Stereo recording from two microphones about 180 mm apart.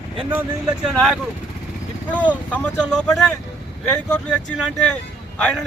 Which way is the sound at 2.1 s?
10° left (ahead or behind).